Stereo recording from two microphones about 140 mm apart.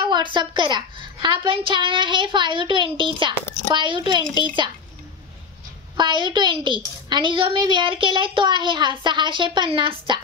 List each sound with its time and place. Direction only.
0.0 s a woman's voice: 35° right (ahead or behind)
5.9 s a woman's voice: 35° right (ahead or behind)